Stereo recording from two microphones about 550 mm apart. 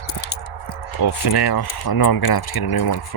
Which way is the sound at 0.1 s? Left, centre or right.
Left.